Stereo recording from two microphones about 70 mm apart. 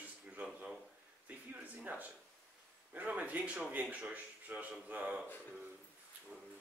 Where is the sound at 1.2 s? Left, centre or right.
Right.